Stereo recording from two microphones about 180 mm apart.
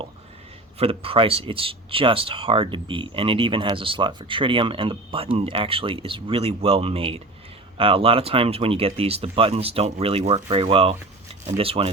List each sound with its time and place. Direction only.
0.8 s speech: 30° right (ahead or behind)